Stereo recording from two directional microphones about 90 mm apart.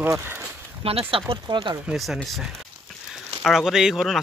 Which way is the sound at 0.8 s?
90° right.